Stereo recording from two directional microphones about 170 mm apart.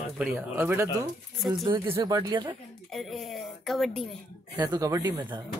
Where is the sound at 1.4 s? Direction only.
Centre (ahead or behind).